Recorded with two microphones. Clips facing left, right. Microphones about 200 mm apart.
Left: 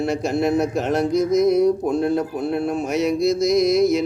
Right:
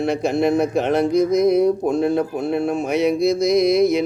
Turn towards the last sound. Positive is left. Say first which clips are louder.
# right 1 dB
turn(degrees=0)  # may be behind; listen again after turning